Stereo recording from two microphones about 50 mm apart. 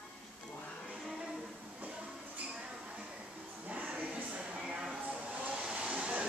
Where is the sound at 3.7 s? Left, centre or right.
Right.